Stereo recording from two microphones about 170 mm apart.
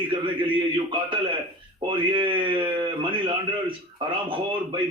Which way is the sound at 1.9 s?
30° right (ahead or behind).